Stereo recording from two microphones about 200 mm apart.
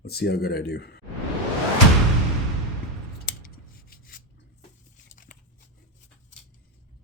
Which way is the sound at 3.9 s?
45° left (ahead or behind).